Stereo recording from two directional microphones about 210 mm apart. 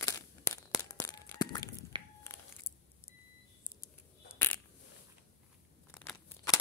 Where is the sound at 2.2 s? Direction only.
15° left (ahead or behind).